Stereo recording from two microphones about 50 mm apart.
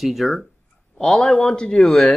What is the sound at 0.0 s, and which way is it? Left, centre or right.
Speech, centre.